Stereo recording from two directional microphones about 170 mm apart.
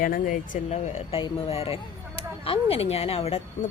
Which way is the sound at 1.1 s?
35° left (ahead or behind).